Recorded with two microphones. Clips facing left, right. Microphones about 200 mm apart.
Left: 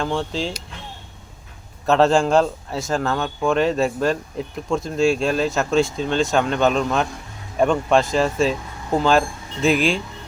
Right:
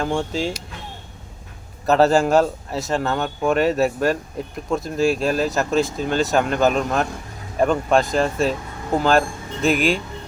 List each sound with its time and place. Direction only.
0.0 s speech: 10° right (ahead or behind)
1.9 s speech: 5° right (ahead or behind)